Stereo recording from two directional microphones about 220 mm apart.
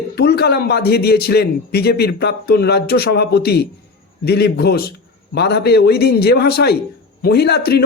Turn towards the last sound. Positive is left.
turn(degrees=45)  # may be behind; listen again after turning